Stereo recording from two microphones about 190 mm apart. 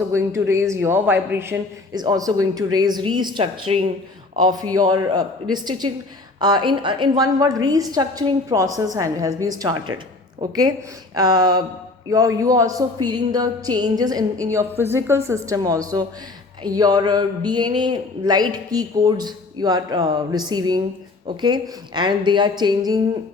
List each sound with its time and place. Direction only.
0.1 s a woman's voice: 15° right (ahead or behind)